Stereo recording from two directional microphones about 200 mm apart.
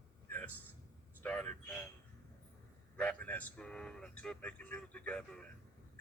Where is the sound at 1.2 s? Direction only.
5° left (ahead or behind).